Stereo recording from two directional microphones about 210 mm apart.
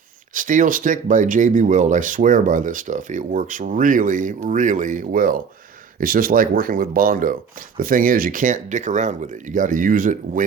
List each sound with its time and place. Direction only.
0.3 s speech: 40° right (ahead or behind)